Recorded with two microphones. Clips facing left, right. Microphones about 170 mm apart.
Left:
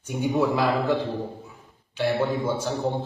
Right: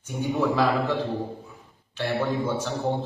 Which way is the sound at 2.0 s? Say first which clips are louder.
Left 2 dB; 20° left (ahead or behind).